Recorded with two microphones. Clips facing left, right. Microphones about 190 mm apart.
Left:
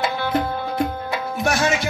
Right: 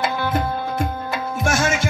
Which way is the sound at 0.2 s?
50° right (ahead or behind).